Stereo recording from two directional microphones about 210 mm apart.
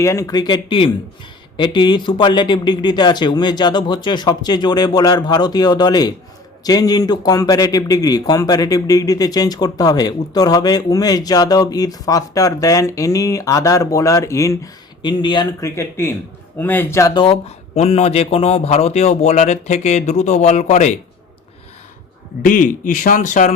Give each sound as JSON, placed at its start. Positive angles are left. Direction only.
{"t": 0.0, "sound": "a man's voice", "side_deg": 15}
{"t": 17.2, "sound": "speech", "side_deg": 30}
{"t": 22.4, "sound": "speech", "side_deg": 40}